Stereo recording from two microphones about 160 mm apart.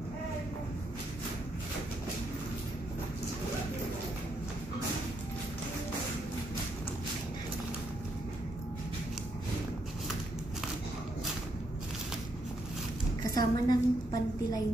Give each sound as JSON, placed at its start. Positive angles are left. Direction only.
{"t": 13.3, "sound": "a woman's voice", "side_deg": 25}